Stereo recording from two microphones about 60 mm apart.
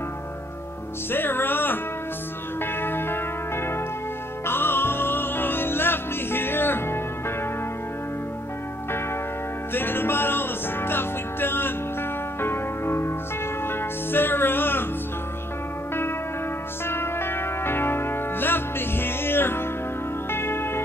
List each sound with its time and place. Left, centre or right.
1.1 s music: left
9.8 s music: left
16.8 s music: left